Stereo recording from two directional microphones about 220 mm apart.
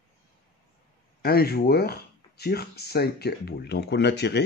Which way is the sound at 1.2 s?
45° left (ahead or behind).